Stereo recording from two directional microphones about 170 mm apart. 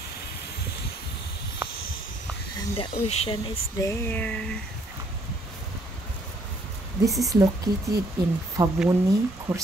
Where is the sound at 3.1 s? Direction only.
40° left (ahead or behind).